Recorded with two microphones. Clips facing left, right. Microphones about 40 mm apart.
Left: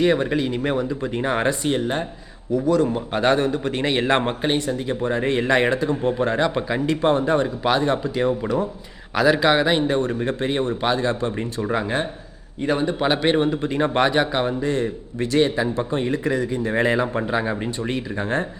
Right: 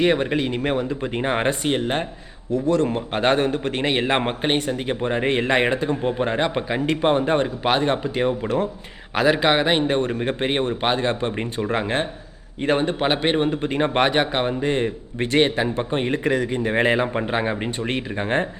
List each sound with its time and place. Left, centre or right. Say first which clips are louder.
0.0 s a man's voice: even; right